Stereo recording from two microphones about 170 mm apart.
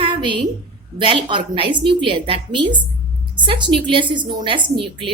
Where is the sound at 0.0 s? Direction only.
30° right (ahead or behind).